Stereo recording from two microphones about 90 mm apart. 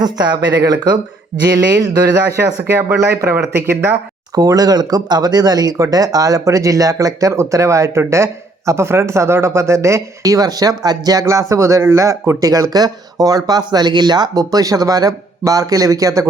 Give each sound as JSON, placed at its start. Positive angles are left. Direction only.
{"t": 0.0, "sound": "speech", "side_deg": -50}
{"t": 2.7, "sound": "speech", "side_deg": -30}
{"t": 4.4, "sound": "speech", "side_deg": -45}